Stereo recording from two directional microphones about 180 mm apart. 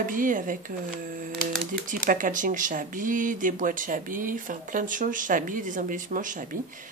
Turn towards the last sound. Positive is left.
turn(degrees=-45)  # may be behind; listen again after turning